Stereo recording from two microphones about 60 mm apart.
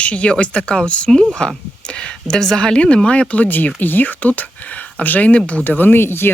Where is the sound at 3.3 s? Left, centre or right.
Left.